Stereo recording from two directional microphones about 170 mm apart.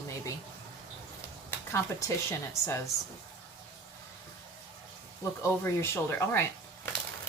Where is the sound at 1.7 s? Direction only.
15° left (ahead or behind).